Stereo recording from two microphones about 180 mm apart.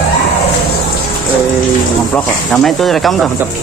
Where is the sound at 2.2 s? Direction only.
Centre (ahead or behind).